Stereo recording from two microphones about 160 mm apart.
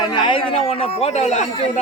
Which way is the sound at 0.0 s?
30° left (ahead or behind).